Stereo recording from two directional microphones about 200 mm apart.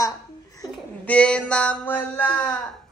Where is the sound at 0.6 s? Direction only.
5° left (ahead or behind).